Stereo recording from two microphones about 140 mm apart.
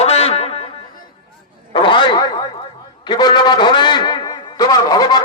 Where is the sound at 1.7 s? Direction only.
35° left (ahead or behind).